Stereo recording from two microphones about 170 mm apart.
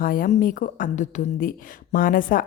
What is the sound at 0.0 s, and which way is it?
Speech, 55° left (ahead or behind).